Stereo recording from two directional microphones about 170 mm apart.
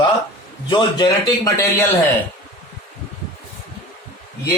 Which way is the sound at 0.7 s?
25° left (ahead or behind).